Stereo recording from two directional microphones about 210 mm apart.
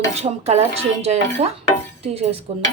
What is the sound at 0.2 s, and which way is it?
A woman's voice, 30° right (ahead or behind).